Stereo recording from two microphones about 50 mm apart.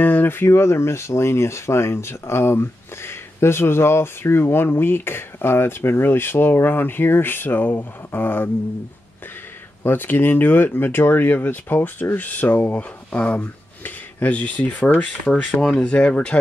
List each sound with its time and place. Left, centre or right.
0.0 s speech: left
9.8 s speech: left; by 16.3 s centre